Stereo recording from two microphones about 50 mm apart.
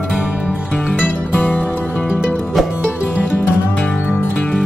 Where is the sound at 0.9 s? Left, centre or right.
Left.